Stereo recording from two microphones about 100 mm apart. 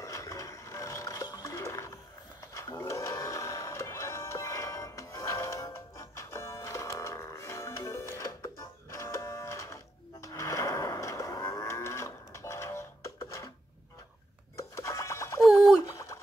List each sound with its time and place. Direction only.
0.0 s music: 35° left (ahead or behind)
8.9 s printer: 25° left (ahead or behind)
10.2 s cattle: 30° left (ahead or behind)
14.6 s bird: 30° left (ahead or behind)
15.9 s a sound: 30° left (ahead or behind)